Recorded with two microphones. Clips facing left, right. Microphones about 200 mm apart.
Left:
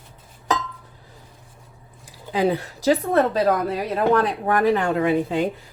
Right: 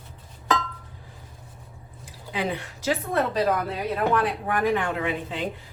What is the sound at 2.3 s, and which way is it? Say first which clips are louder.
Speech: left 8 dB; 40° left (ahead or behind).